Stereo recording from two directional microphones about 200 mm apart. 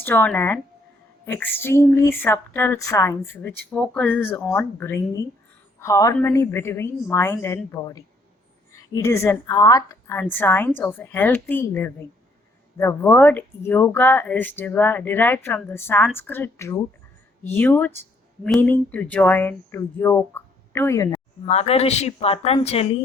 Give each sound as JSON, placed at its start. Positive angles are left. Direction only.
{"t": 0.0, "sound": "a woman's voice", "side_deg": 10}
{"t": 21.4, "sound": "speech", "side_deg": 30}